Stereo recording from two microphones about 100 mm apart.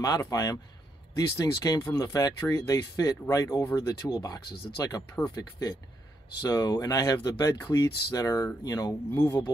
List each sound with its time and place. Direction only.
0.2 s speech: 35° left (ahead or behind)
9.1 s speech: 20° left (ahead or behind)